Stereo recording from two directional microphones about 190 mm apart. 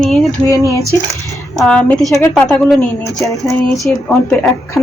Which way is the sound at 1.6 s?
5° left (ahead or behind).